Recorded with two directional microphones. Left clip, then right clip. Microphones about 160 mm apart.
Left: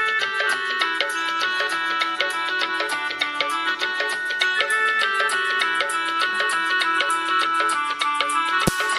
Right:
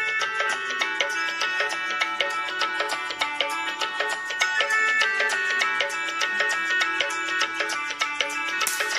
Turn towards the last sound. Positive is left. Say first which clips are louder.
# left 5 dB
turn(degrees=70)  # may be behind; listen again after turning